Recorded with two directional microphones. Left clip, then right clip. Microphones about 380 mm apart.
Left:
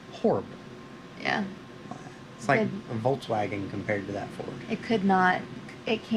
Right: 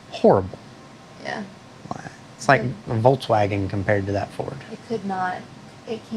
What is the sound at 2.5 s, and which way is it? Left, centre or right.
Speech, right.